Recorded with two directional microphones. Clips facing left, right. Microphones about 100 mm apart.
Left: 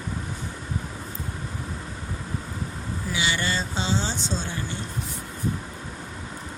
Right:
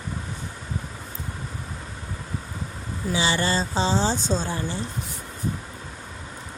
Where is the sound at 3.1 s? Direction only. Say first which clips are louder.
Right 4 dB; 35° right (ahead or behind).